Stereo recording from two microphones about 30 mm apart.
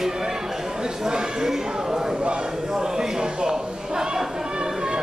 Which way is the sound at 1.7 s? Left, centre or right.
Right.